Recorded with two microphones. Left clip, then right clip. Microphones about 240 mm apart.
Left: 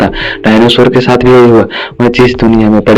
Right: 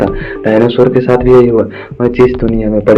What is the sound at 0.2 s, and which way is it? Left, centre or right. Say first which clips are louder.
A man's voice: left 3 dB; left.